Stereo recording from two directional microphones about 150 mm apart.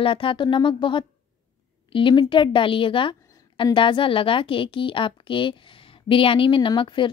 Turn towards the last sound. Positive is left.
turn(degrees=35)  # may be behind; listen again after turning